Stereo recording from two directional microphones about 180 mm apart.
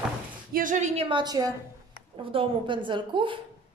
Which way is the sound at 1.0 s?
25° right (ahead or behind).